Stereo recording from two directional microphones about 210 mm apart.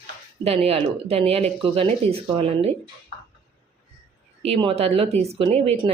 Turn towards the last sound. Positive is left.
turn(degrees=-30)  # may be behind; listen again after turning